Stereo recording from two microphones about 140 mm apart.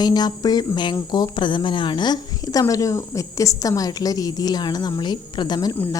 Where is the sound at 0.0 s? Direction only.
30° left (ahead or behind).